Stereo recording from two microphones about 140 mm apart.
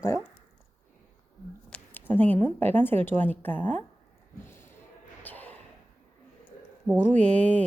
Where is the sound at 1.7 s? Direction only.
15° left (ahead or behind).